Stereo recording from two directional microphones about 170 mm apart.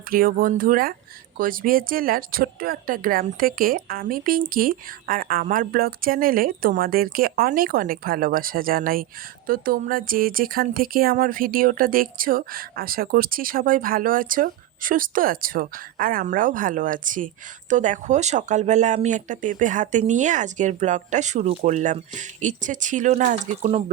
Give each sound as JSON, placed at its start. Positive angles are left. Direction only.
{"t": 0.1, "sound": "speech", "side_deg": -55}